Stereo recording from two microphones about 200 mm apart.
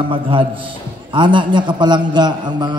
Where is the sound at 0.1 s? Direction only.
25° right (ahead or behind).